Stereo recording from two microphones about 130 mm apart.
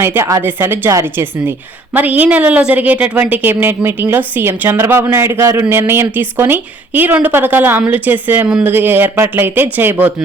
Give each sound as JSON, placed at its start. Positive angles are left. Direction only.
{"t": 0.0, "sound": "a woman's voice", "side_deg": -20}
{"t": 8.7, "sound": "a woman's voice", "side_deg": -15}